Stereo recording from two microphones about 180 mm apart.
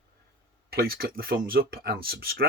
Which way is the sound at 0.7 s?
55° right (ahead or behind).